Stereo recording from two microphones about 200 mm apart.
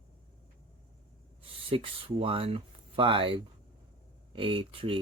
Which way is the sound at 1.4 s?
25° right (ahead or behind).